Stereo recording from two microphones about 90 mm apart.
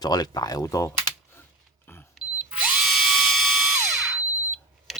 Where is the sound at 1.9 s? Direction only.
25° left (ahead or behind).